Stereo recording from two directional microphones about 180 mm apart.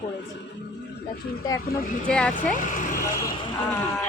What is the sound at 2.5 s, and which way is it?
Speech, 45° left (ahead or behind).